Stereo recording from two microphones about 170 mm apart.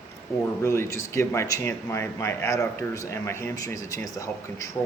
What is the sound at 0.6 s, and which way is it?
Speech, 15° left (ahead or behind).